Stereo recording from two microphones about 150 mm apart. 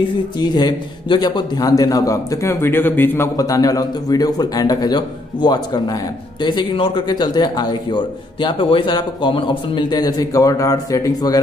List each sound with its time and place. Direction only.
0.4 s a man's voice: 25° left (ahead or behind)
3.3 s a man's voice: 25° left (ahead or behind)